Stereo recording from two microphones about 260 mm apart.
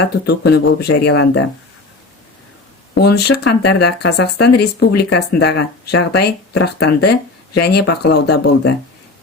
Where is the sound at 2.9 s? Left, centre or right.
Left.